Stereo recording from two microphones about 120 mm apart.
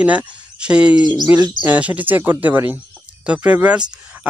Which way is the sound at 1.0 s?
35° right (ahead or behind).